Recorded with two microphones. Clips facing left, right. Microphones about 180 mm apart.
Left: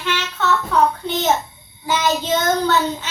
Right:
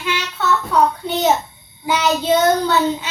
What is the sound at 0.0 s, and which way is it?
Child singing, 10° right (ahead or behind).